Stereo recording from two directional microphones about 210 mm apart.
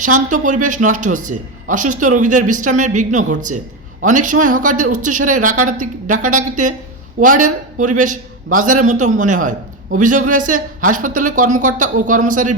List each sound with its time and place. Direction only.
0.0 s a man's voice: 40° right (ahead or behind)